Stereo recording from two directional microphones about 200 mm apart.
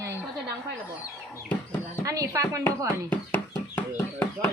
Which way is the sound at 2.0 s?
15° right (ahead or behind).